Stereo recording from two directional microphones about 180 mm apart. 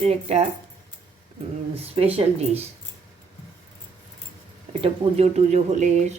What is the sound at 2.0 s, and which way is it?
Speech, 35° right (ahead or behind).